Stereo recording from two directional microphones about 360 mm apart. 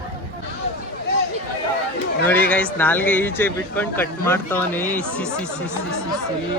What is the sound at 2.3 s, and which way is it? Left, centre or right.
Speech, centre.